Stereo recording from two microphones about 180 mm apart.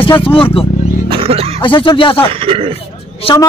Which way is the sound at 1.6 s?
30° left (ahead or behind).